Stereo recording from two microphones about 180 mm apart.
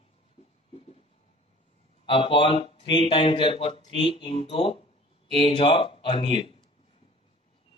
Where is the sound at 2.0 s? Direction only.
30° left (ahead or behind).